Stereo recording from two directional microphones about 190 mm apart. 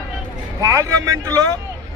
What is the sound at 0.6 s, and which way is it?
Speech, 15° right (ahead or behind).